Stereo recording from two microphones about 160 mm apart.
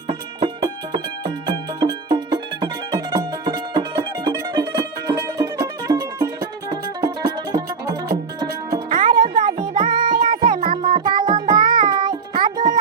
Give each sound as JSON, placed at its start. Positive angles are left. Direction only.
{"t": 0.1, "sound": "music", "side_deg": -40}
{"t": 0.6, "sound": "music", "side_deg": -25}
{"t": 8.9, "sound": "music", "side_deg": -55}
{"t": 9.1, "sound": "music", "side_deg": -25}
{"t": 10.2, "sound": "music", "side_deg": -60}
{"t": 10.4, "sound": "music", "side_deg": -30}